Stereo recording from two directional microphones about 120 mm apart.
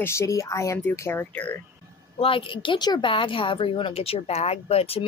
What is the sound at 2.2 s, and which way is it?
A woman's voice, 45° left (ahead or behind).